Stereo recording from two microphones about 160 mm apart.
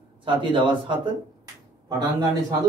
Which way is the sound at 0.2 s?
30° right (ahead or behind).